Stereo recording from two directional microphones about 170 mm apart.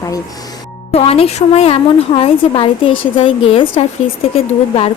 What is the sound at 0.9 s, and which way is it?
A woman's voice, 35° left (ahead or behind).